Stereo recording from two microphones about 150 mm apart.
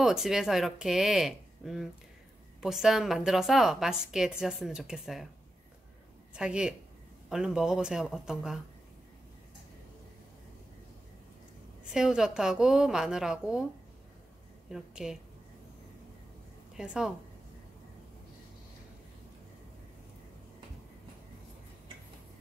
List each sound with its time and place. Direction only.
0.0 s a woman's voice: 5° right (ahead or behind)
6.3 s a woman's voice: 5° right (ahead or behind)
11.8 s a woman's voice: 5° right (ahead or behind)
14.7 s a woman's voice: 5° right (ahead or behind)
16.7 s a woman's voice: 5° right (ahead or behind)